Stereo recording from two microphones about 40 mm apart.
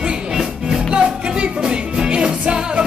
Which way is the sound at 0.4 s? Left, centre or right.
Centre.